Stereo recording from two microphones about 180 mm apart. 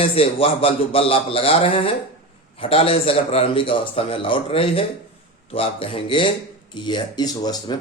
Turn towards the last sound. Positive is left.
turn(degrees=20)  # may be behind; listen again after turning